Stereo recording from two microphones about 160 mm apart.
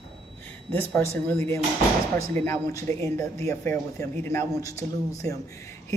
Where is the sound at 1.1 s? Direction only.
10° left (ahead or behind).